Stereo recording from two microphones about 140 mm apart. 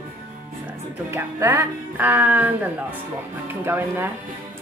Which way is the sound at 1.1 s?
20° right (ahead or behind).